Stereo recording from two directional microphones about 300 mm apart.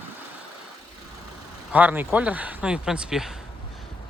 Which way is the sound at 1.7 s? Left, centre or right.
Centre.